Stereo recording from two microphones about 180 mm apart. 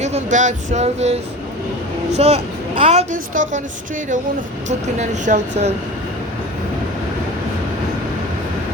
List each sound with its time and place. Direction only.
0.0 s a woman's voice: 40° right (ahead or behind)
4.9 s a woman's voice: 40° right (ahead or behind)